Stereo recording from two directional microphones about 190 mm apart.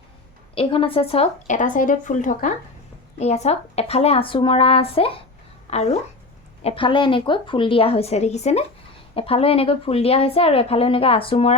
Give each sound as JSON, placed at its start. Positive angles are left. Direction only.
{"t": 0.5, "sound": "a woman's voice", "side_deg": 30}